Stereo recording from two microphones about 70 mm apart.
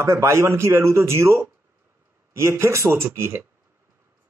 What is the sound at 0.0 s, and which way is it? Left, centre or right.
Speech, right.